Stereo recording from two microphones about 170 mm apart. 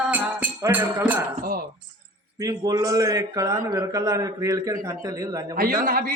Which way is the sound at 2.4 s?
20° right (ahead or behind).